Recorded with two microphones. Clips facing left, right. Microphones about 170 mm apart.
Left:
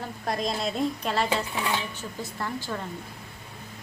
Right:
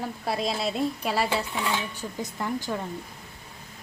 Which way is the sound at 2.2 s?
15° right (ahead or behind).